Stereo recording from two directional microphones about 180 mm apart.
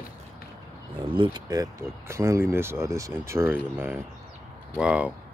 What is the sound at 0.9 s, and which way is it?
Speech, 30° right (ahead or behind).